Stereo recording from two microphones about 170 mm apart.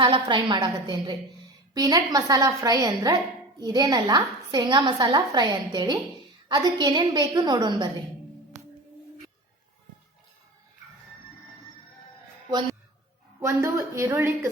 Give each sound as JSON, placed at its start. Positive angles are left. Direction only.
{"t": 0.0, "sound": "a woman's voice", "side_deg": -30}
{"t": 12.5, "sound": "a woman's voice", "side_deg": -25}